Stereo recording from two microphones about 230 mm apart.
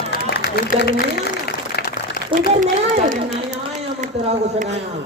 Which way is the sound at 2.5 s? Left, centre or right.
Right.